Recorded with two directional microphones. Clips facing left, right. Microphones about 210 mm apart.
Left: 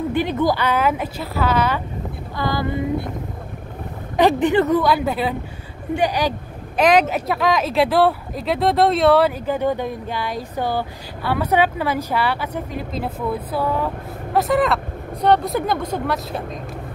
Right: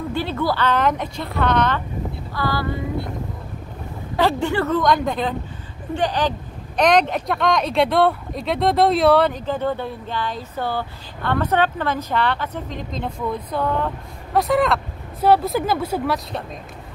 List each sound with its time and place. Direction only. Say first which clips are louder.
0.1 s speech: left 2 dB; 15° left (ahead or behind)
2.3 s female singing: left 2 dB; 20° left (ahead or behind)
4.2 s speech: left 4 dB; 20° left (ahead or behind)
4.8 s speech: even; 5° left (ahead or behind)